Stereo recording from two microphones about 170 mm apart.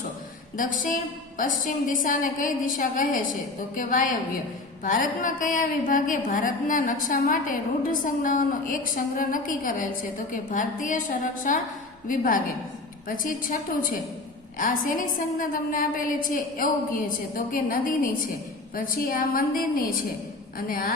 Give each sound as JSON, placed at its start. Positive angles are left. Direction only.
{"t": 0.5, "sound": "a woman's voice", "side_deg": 50}